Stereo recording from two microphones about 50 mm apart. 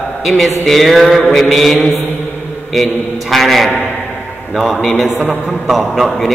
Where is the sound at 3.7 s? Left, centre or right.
Left.